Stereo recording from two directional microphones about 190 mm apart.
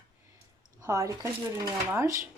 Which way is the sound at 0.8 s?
15° right (ahead or behind).